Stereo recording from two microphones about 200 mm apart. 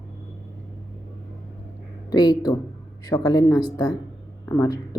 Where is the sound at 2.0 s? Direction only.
20° left (ahead or behind).